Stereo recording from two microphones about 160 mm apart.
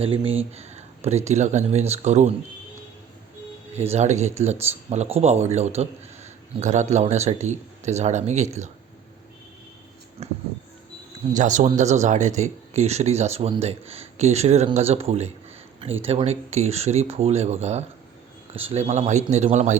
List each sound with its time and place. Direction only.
0.0 s speech: 35° right (ahead or behind)
3.9 s speech: 45° right (ahead or behind)
10.2 s a sound: 40° right (ahead or behind)
11.3 s speech: 50° right (ahead or behind)